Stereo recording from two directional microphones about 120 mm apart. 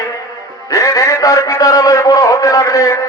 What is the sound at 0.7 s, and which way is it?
A man's voice, 30° left (ahead or behind).